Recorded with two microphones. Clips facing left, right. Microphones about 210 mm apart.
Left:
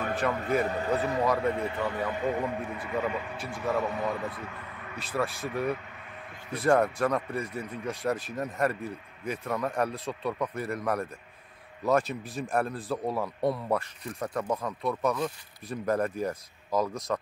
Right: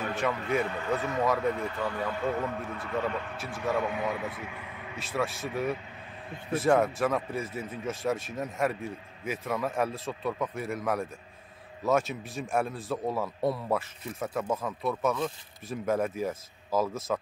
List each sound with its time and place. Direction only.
0.5 s a man's voice: 40° left (ahead or behind)
1.2 s a man's voice: centre (ahead or behind)
1.5 s a man's voice: 25° left (ahead or behind); by 17.2 s 5° right (ahead or behind)